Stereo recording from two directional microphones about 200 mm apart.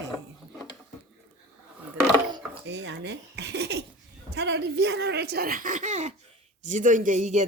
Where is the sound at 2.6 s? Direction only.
60° right (ahead or behind).